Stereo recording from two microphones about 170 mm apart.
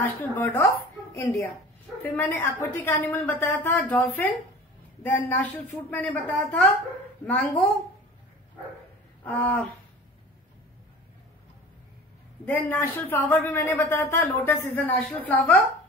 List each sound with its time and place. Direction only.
0.0 s speech: 10° left (ahead or behind)
9.2 s speech: 10° left (ahead or behind)
12.4 s a woman's voice: 10° left (ahead or behind)